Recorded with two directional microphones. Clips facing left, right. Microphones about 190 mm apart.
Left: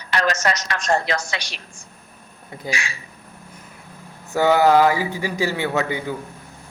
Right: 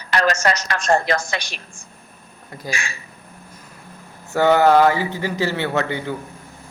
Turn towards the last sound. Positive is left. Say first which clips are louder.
# even
turn(degrees=10)  # may be behind; listen again after turning